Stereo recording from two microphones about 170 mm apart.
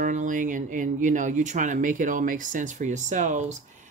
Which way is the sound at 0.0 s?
50° right (ahead or behind).